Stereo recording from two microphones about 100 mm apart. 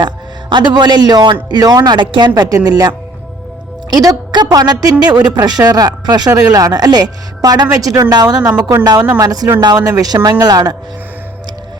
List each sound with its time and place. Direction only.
0.5 s speech: 45° right (ahead or behind)
2.3 s a woman's voice: 35° right (ahead or behind)